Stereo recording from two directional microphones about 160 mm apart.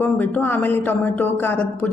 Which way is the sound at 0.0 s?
10° left (ahead or behind).